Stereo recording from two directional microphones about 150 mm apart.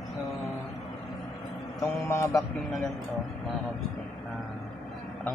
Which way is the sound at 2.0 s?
15° left (ahead or behind).